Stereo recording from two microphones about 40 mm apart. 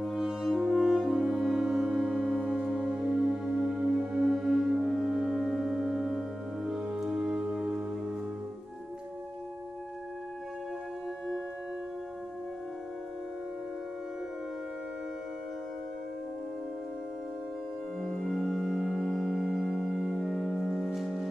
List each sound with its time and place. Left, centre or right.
0.2 s french horn: centre
1.2 s music: centre
18.0 s music: centre
19.0 s music: centre
19.3 s music: centre